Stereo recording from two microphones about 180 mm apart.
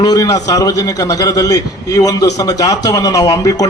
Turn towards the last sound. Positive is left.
turn(degrees=20)  # may be behind; listen again after turning